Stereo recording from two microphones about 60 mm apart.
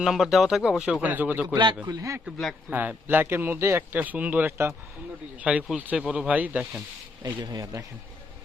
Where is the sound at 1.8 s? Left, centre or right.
Right.